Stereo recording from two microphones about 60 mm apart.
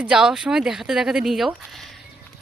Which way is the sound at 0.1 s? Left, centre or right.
Centre.